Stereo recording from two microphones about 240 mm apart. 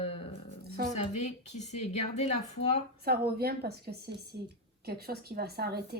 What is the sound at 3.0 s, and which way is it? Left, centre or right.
Speech, right.